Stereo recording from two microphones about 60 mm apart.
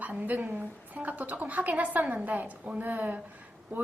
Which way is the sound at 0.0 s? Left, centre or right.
Right.